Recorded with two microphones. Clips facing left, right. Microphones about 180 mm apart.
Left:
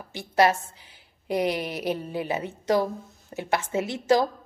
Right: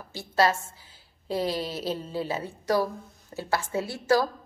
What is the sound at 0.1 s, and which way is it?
A woman's voice, 15° left (ahead or behind).